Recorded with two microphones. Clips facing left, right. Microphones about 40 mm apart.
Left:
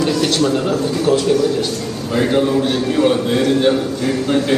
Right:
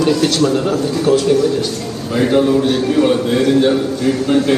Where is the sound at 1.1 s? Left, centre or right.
Left.